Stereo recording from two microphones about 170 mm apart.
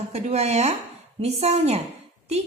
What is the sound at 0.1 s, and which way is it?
Speech, 40° right (ahead or behind).